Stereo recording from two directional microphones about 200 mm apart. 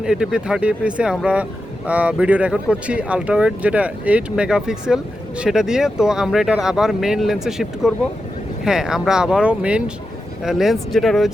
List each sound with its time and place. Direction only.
0.0 s speech: 5° right (ahead or behind)